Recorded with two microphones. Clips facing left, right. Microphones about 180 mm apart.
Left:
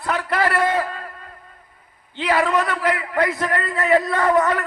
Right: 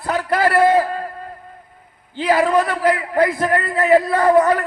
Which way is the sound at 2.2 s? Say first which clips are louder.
Right 4 dB; 35° right (ahead or behind).